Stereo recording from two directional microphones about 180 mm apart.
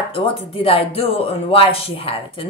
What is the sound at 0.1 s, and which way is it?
A woman's voice, 30° left (ahead or behind).